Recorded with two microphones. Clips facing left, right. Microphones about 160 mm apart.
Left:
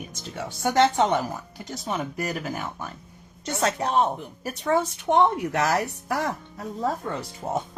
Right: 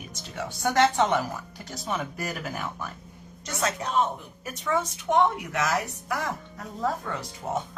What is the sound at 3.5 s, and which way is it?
Speech, 30° left (ahead or behind).